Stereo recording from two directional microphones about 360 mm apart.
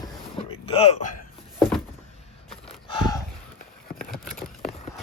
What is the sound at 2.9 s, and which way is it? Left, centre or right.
Gasp, centre.